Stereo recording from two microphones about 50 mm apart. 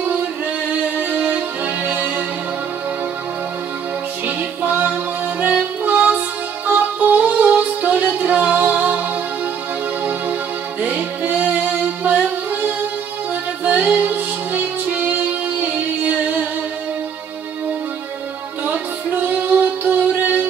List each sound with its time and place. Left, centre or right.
0.7 s music: right
4.4 s music: right
10.8 s music: right
13.7 s music: right
19.2 s music: right